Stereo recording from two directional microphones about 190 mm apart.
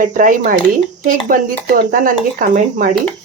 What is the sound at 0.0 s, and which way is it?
Speech, 45° right (ahead or behind).